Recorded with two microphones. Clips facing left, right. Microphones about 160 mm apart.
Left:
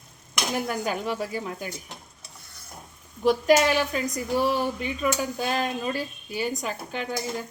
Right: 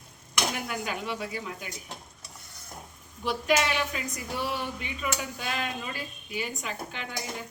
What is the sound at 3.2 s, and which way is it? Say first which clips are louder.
Speech: left 7 dB; 40° left (ahead or behind).